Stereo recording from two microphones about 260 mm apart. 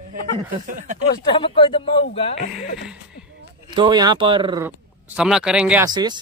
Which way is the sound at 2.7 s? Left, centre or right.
Centre.